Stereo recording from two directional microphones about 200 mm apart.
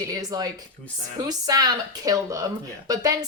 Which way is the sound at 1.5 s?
20° right (ahead or behind).